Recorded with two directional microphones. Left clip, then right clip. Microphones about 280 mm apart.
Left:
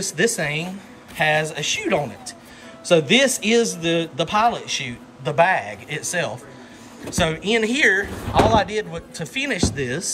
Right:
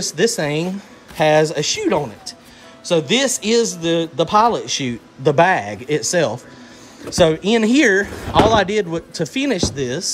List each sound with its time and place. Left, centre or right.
0.0 s a man's voice: centre